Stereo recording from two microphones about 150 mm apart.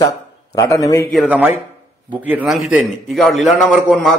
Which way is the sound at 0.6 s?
20° left (ahead or behind).